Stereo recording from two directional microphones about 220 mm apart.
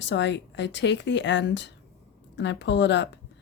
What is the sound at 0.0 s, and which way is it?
Speech, 55° left (ahead or behind).